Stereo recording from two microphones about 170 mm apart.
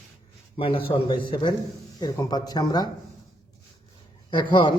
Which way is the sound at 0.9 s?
30° left (ahead or behind).